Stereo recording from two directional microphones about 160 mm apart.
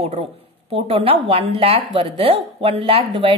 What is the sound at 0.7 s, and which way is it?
Speech, 35° right (ahead or behind).